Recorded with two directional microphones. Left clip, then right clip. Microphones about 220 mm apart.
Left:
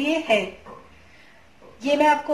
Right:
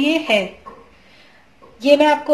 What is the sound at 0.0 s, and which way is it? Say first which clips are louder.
Speech: right 4 dB; 50° right (ahead or behind).